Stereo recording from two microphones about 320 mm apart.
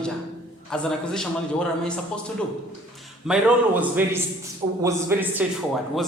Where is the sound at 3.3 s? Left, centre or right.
Centre.